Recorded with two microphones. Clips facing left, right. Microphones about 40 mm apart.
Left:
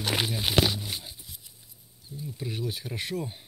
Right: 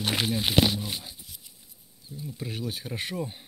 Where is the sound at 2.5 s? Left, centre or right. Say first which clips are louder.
Even; right.